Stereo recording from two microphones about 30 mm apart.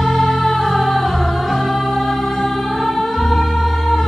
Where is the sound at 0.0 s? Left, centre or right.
Centre.